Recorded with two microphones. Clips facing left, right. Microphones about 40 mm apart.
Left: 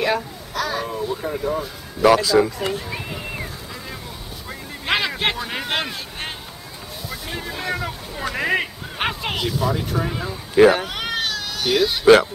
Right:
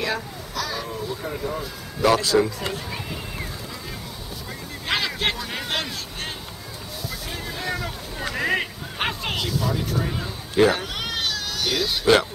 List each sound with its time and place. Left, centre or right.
0.0 s a sound: left
1.2 s speech: centre
4.8 s a man's voice: left